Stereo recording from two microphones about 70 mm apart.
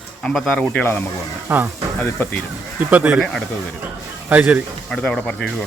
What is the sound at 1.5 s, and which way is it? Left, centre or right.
Speech, right.